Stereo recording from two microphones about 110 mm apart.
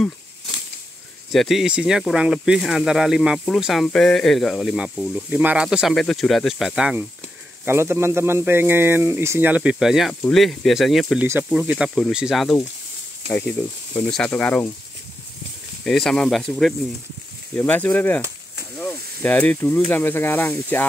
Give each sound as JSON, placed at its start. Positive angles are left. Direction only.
{"t": 1.3, "sound": "speech", "side_deg": 0}
{"t": 7.6, "sound": "speech", "side_deg": -20}
{"t": 11.5, "sound": "speech", "side_deg": -15}
{"t": 13.3, "sound": "speech", "side_deg": 10}
{"t": 15.8, "sound": "speech", "side_deg": 5}